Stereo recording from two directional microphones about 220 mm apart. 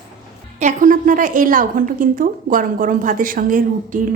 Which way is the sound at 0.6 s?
35° right (ahead or behind).